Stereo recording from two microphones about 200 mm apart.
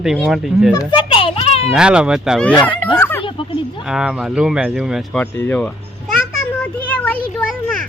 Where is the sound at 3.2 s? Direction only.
25° left (ahead or behind).